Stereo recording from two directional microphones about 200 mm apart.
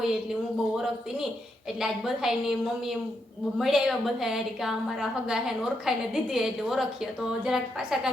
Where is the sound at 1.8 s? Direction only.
Centre (ahead or behind).